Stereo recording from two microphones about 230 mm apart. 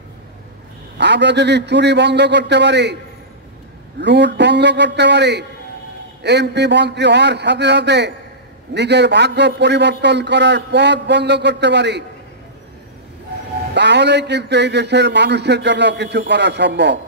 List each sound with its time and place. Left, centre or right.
0.9 s a man's voice: right
4.0 s a man's voice: right
13.7 s a man's voice: right